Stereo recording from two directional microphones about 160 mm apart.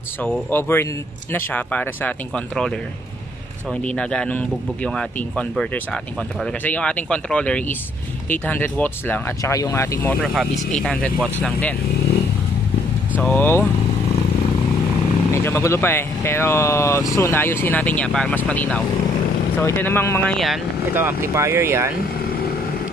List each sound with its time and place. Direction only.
0.2 s speech: 10° left (ahead or behind)
3.8 s speech: 5° left (ahead or behind)
10.2 s speech: 5° right (ahead or behind)
13.2 s speech: 10° left (ahead or behind)
15.3 s speech: 15° left (ahead or behind)
20.9 s speech: 15° right (ahead or behind)